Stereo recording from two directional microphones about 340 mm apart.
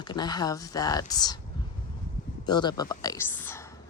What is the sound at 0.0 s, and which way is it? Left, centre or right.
Speech, centre.